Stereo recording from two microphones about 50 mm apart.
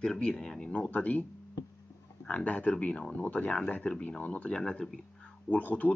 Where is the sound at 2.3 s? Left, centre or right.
Left.